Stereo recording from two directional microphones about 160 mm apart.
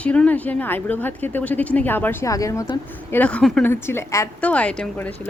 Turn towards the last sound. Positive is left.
turn(degrees=10)  # may be behind; listen again after turning